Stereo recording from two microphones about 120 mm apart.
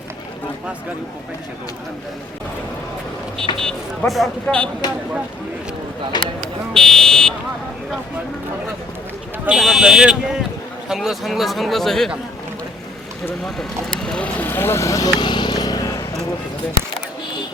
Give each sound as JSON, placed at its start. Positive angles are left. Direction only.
{"t": 3.6, "sound": "speech", "side_deg": 0}
{"t": 6.1, "sound": "speech", "side_deg": 35}
{"t": 6.7, "sound": "buzzer", "side_deg": 5}
{"t": 9.5, "sound": "speech", "side_deg": -5}
{"t": 14.0, "sound": "vehicle", "side_deg": 10}